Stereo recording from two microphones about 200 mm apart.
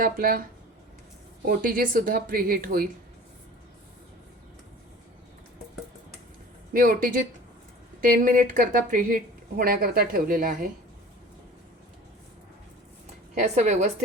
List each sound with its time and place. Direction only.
0.0 s a woman's voice: 45° right (ahead or behind)
1.5 s a woman's voice: 45° right (ahead or behind)
6.7 s a woman's voice: 45° right (ahead or behind)
13.3 s a woman's voice: 35° right (ahead or behind)